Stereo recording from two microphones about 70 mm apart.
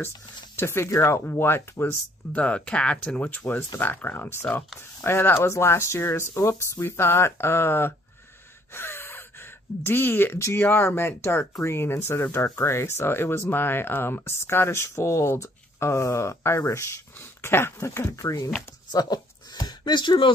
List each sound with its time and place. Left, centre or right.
0.6 s speech: left
2.3 s speech: centre; by 18.5 s left
18.9 s a sound: left